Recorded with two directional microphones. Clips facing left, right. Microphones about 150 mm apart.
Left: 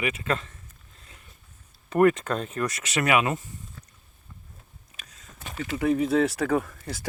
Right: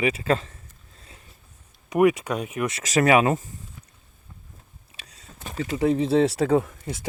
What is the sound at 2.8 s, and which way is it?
Speech, 35° right (ahead or behind).